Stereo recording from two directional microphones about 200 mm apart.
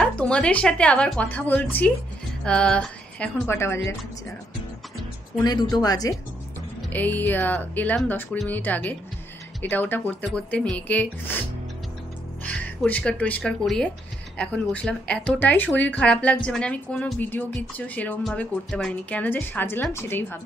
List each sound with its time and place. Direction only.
0.0 s a woman's voice: 5° left (ahead or behind)
5.4 s speech: 20° left (ahead or behind)
6.9 s speech: 10° left (ahead or behind)
12.4 s speech: 10° left (ahead or behind)